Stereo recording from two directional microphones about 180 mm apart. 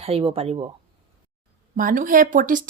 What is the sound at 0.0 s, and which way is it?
Speech, 35° right (ahead or behind).